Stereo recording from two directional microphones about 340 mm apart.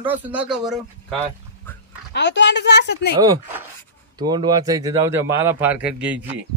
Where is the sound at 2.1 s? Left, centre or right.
Left.